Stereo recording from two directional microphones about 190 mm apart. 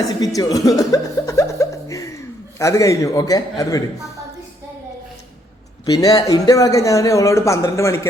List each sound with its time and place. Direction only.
0.3 s speech: 20° left (ahead or behind)
5.8 s a man's voice: 20° left (ahead or behind)